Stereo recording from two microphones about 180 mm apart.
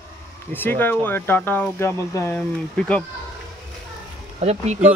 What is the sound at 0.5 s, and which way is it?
Speech, 10° left (ahead or behind).